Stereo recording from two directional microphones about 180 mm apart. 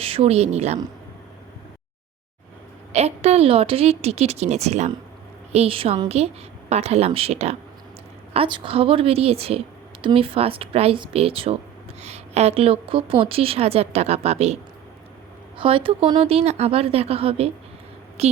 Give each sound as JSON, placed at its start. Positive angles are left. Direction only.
{"t": 0.0, "sound": "a woman's voice", "side_deg": -30}
{"t": 2.9, "sound": "a woman's voice", "side_deg": -35}